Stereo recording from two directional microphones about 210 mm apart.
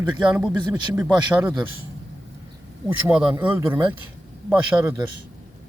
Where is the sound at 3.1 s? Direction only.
5° right (ahead or behind).